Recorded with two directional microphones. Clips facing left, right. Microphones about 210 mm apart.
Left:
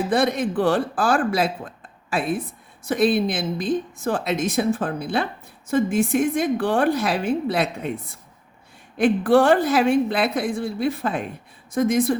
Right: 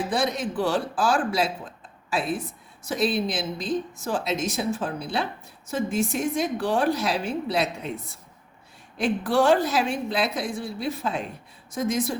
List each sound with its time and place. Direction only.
0.1 s speech: 55° left (ahead or behind)